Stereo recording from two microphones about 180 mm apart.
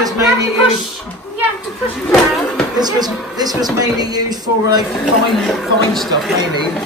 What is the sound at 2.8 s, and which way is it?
Speech, 20° right (ahead or behind).